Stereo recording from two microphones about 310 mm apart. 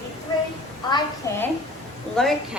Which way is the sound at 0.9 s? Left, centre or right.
Centre.